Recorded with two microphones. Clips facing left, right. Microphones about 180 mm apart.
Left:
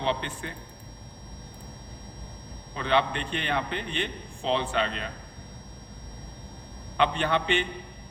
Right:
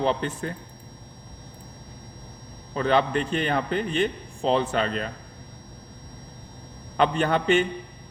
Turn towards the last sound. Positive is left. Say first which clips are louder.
# right 5 dB
turn(degrees=-45)  # may be behind; listen again after turning